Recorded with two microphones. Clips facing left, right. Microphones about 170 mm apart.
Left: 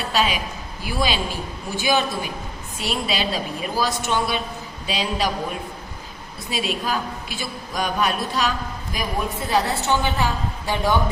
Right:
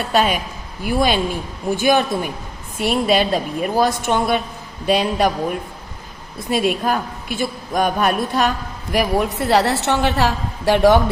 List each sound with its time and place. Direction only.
0.1 s a woman's voice: 50° right (ahead or behind)
6.5 s a woman's voice: 55° right (ahead or behind); by 11.0 s 80° right